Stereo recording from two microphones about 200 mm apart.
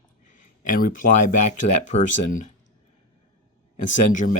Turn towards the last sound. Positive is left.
turn(degrees=40)  # may be behind; listen again after turning